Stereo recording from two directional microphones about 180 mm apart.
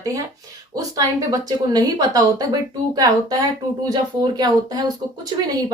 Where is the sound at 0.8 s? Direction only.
20° right (ahead or behind).